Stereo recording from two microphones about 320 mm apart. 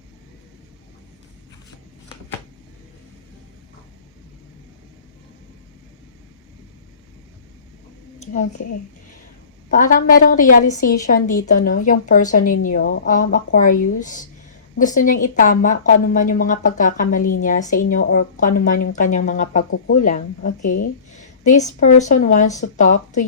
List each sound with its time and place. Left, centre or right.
8.3 s a woman's voice: left
9.6 s a woman's voice: left